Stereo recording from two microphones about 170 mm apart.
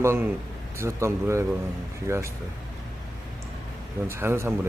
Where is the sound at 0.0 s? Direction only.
15° right (ahead or behind).